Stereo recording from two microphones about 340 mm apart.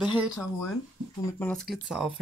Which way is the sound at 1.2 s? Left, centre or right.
Centre.